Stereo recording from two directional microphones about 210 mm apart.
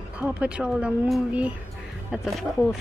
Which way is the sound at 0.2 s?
5° right (ahead or behind).